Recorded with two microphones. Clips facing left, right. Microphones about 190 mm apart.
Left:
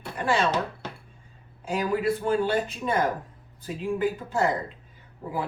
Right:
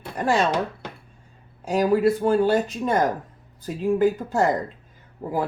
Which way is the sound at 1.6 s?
40° right (ahead or behind).